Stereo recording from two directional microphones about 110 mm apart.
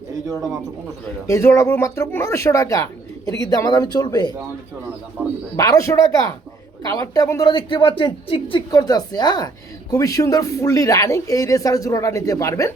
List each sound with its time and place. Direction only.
1.3 s speech: 25° left (ahead or behind)
5.2 s speech: 20° right (ahead or behind)
5.5 s speech: 30° left (ahead or behind)
7.4 s speech: 45° left (ahead or behind)
8.7 s speech: 35° left (ahead or behind)